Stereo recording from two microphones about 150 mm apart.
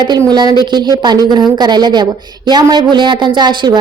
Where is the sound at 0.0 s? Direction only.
30° right (ahead or behind).